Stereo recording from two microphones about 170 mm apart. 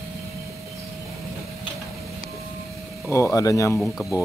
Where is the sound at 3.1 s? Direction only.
20° left (ahead or behind).